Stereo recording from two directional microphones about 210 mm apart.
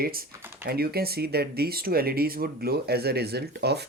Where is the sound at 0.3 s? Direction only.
10° right (ahead or behind).